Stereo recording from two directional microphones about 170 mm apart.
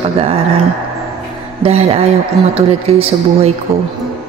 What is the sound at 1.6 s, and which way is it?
Speech, 35° right (ahead or behind).